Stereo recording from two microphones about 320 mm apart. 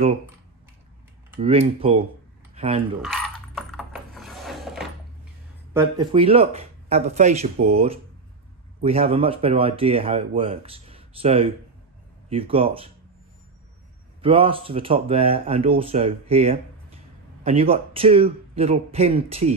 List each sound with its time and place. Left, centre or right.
1.3 s speech: centre
3.0 s coin: centre
5.7 s a man's voice: centre
14.2 s a man's voice: centre